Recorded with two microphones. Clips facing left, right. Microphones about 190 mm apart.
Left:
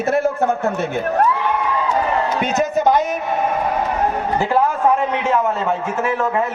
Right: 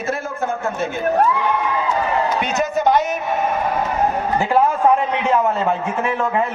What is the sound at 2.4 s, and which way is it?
Speech, 35° left (ahead or behind).